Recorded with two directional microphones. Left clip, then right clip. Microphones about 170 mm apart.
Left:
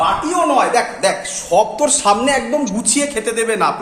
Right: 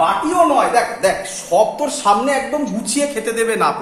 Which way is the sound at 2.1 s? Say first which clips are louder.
Right 2 dB; 30° left (ahead or behind).